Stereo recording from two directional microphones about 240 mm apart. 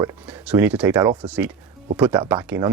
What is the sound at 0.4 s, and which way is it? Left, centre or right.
Speech, centre.